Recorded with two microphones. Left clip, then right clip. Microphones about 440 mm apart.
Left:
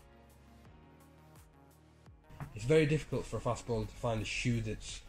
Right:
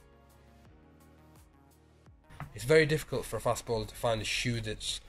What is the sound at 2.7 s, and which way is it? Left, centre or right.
Speech, centre.